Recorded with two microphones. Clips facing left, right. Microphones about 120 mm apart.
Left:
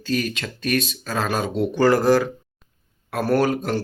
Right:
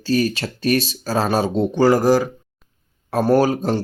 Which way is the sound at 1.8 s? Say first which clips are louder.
Right 2 dB; 15° right (ahead or behind).